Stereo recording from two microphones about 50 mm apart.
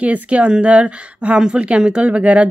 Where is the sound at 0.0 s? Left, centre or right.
Right.